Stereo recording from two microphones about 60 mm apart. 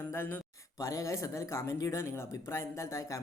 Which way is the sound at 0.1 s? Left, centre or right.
Left.